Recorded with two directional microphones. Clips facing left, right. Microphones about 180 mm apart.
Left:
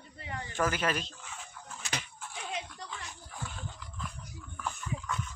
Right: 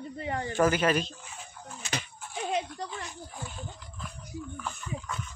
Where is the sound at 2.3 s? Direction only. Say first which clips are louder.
Right 9 dB; 45° right (ahead or behind).